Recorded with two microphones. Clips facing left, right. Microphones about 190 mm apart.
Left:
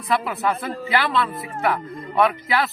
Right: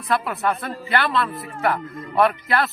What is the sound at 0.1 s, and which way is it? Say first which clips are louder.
Speech: even; centre (ahead or behind).